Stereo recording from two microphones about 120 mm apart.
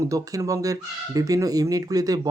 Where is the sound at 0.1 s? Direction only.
30° right (ahead or behind).